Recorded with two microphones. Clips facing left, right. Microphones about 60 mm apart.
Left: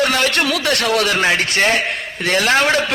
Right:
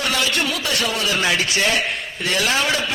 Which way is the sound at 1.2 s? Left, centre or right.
Left.